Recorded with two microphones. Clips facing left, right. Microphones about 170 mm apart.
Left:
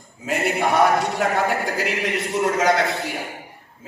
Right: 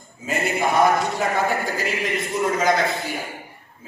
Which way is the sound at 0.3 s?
70° left (ahead or behind).